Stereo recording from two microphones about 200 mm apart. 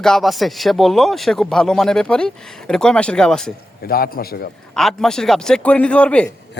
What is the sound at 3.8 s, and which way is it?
Speech, 50° left (ahead or behind).